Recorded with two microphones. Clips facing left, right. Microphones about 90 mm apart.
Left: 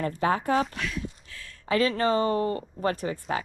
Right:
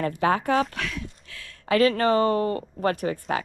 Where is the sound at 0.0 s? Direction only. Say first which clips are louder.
Right 3 dB; 60° right (ahead or behind).